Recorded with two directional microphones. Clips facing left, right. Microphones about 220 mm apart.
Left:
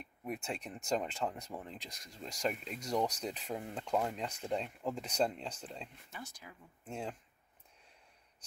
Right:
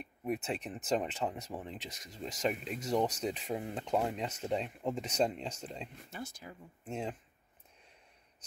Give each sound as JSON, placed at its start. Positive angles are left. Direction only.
{"t": 0.3, "sound": "speech", "side_deg": -5}
{"t": 3.8, "sound": "speech", "side_deg": -20}
{"t": 4.9, "sound": "speech", "side_deg": -5}
{"t": 6.1, "sound": "speech", "side_deg": -30}
{"t": 6.8, "sound": "speech", "side_deg": -5}